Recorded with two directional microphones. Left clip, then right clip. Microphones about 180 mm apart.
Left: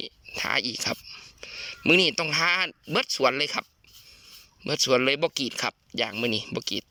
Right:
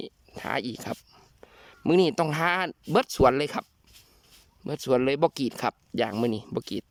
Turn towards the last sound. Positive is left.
turn(degrees=-25)  # may be behind; listen again after turning